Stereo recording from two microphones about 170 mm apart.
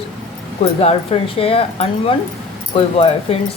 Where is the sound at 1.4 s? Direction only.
35° left (ahead or behind).